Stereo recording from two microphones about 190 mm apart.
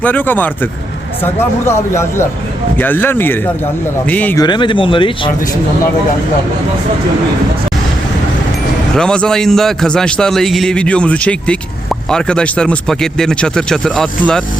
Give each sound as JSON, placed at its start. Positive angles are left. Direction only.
{"t": 0.0, "sound": "speech", "side_deg": 10}
{"t": 4.4, "sound": "speech", "side_deg": 25}
{"t": 9.0, "sound": "a man's voice", "side_deg": 5}